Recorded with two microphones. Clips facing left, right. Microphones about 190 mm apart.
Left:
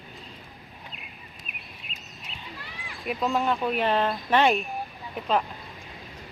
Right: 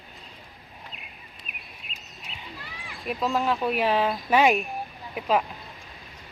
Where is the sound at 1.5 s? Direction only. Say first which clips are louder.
Left 1 dB; centre (ahead or behind).